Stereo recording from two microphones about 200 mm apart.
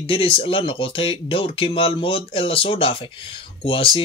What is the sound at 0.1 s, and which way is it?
Speech, 25° left (ahead or behind).